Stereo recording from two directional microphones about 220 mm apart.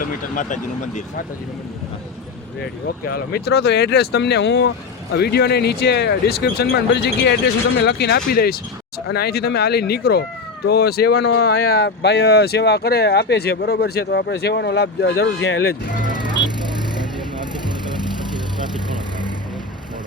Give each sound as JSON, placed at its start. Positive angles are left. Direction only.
{"t": 0.0, "sound": "speech", "side_deg": 35}
{"t": 3.1, "sound": "speech", "side_deg": 45}
{"t": 16.1, "sound": "music", "side_deg": -20}